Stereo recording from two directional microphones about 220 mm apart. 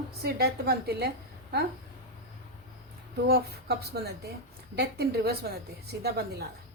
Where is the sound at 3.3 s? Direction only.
45° right (ahead or behind).